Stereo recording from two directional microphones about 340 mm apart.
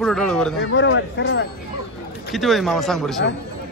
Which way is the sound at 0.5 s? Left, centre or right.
Left.